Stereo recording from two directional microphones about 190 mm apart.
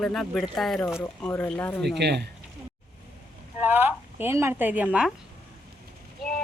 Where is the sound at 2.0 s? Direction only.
60° right (ahead or behind).